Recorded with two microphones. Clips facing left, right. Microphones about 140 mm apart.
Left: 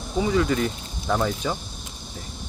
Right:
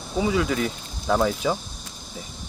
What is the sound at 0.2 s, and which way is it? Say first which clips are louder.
Speech: left 1 dB; 5° right (ahead or behind).